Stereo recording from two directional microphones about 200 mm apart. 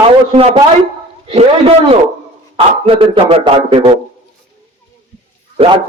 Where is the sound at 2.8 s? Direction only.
25° right (ahead or behind).